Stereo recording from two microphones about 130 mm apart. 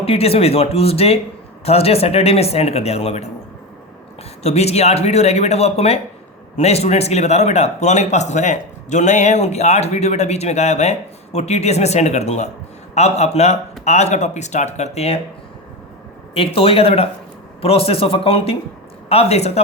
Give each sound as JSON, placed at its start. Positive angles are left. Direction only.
{"t": 0.0, "sound": "speech", "side_deg": 50}
{"t": 4.4, "sound": "speech", "side_deg": 55}
{"t": 16.3, "sound": "speech", "side_deg": 45}